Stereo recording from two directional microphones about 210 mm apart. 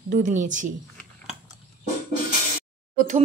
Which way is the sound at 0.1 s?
35° right (ahead or behind).